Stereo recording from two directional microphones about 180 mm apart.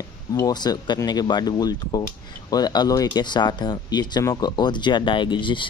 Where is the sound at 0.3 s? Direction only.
20° left (ahead or behind).